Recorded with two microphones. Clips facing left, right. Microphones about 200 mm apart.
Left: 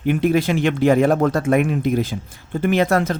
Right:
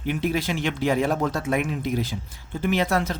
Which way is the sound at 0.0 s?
55° left (ahead or behind).